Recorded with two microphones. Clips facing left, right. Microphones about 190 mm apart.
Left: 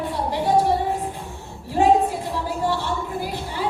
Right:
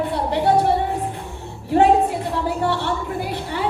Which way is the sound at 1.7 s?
65° right (ahead or behind).